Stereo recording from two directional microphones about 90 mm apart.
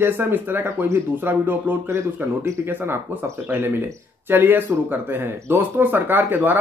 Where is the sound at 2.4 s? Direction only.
35° right (ahead or behind).